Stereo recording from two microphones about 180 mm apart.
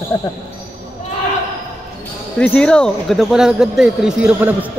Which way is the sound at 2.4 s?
5° left (ahead or behind).